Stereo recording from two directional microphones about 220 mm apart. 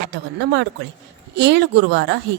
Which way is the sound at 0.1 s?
50° right (ahead or behind).